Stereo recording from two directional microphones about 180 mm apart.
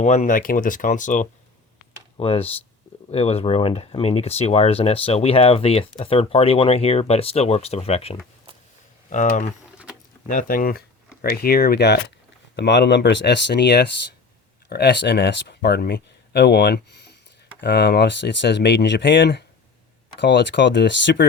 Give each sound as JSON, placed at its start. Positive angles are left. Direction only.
{"t": 0.0, "sound": "speech", "side_deg": 40}
{"t": 2.1, "sound": "speech", "side_deg": 30}